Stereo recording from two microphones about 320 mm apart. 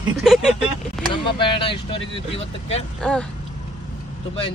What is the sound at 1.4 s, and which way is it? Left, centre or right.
Speech, centre.